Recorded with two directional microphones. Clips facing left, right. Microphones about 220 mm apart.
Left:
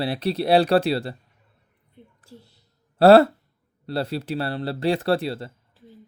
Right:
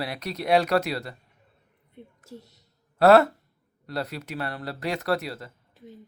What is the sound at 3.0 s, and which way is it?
Speech, 30° left (ahead or behind).